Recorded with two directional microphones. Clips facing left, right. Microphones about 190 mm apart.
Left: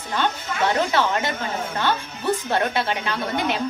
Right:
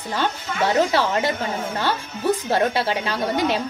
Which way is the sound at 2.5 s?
35° right (ahead or behind).